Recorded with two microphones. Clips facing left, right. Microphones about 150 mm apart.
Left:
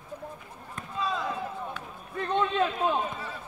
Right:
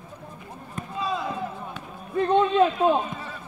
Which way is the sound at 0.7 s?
10° right (ahead or behind).